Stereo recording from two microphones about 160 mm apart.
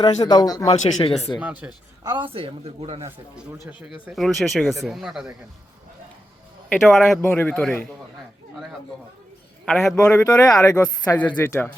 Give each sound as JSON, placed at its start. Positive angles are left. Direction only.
{"t": 0.0, "sound": "a woman's voice", "side_deg": 25}
{"t": 0.7, "sound": "speech", "side_deg": 35}
{"t": 1.4, "sound": "speech", "side_deg": -10}
{"t": 2.0, "sound": "speech", "side_deg": -30}
{"t": 3.7, "sound": "speech", "side_deg": -10}
{"t": 6.7, "sound": "a man's voice", "side_deg": 0}
{"t": 9.6, "sound": "speech", "side_deg": 5}
{"t": 10.4, "sound": "a woman's voice", "side_deg": 20}